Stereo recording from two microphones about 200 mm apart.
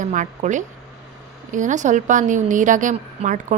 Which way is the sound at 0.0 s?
40° right (ahead or behind).